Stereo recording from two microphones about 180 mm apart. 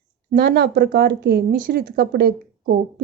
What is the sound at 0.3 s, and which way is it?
A woman's voice, 65° right (ahead or behind).